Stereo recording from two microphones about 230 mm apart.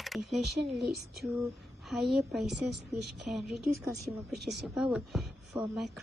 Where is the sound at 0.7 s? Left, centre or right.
Centre.